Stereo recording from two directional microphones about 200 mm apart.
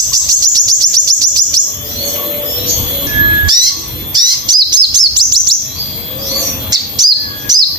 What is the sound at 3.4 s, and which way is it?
Bird, 20° right (ahead or behind).